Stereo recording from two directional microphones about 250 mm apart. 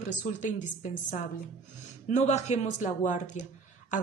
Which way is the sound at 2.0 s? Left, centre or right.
Left.